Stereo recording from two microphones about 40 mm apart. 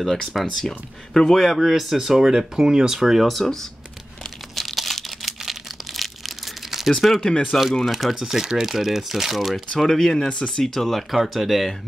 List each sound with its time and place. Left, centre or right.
0.0 s speech: centre
0.7 s speech: centre
1.7 s speech: centre
4.6 s crumpling: centre
7.2 s speech: left
7.8 s speech: centre
9.8 s speech: centre
10.2 s speech: left
10.6 s speech: centre